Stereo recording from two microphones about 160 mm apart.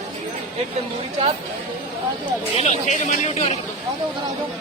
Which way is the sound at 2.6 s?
45° left (ahead or behind).